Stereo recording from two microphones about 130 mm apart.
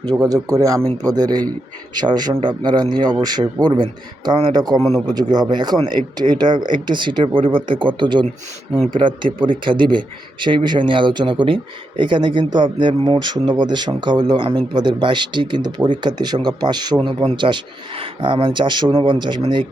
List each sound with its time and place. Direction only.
0.3 s speech: 30° right (ahead or behind)
4.8 s a man's voice: centre (ahead or behind)
5.0 s speech: 30° right (ahead or behind)